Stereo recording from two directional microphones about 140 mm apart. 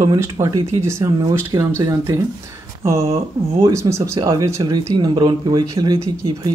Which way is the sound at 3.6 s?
20° right (ahead or behind).